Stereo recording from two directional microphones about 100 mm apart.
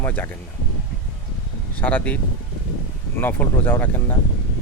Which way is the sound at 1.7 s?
15° left (ahead or behind).